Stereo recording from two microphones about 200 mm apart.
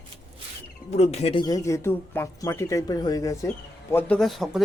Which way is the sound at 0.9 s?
35° left (ahead or behind).